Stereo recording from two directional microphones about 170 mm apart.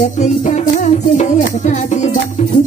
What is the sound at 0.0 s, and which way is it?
Music, 45° left (ahead or behind).